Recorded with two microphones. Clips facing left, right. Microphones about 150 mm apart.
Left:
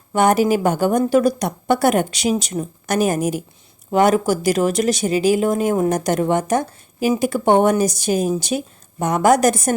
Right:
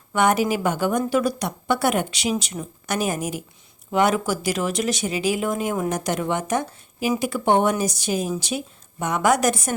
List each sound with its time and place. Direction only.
0.1 s speech: 35° left (ahead or behind)